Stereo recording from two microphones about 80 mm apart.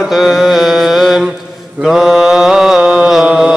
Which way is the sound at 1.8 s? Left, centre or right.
Centre.